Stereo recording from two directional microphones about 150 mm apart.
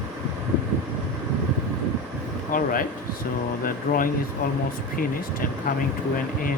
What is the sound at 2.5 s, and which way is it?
Speech, 70° left (ahead or behind).